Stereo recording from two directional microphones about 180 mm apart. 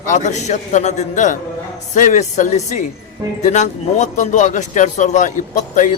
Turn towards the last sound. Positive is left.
turn(degrees=45)  # may be behind; listen again after turning